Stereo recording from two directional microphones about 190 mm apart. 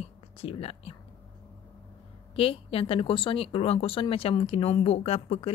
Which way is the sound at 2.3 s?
30° left (ahead or behind).